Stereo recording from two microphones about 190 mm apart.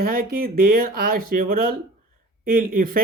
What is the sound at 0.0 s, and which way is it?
Speech, 50° right (ahead or behind).